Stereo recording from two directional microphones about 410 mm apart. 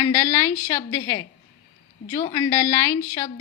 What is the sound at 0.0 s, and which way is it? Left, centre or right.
A woman's voice, centre.